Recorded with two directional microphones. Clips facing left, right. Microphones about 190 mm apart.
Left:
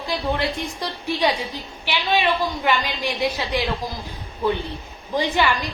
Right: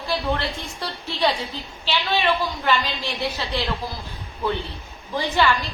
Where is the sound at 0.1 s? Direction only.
15° left (ahead or behind).